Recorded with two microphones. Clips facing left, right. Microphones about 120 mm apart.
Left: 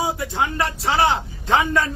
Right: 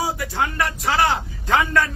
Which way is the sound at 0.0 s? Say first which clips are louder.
Left 1 dB; 20° left (ahead or behind).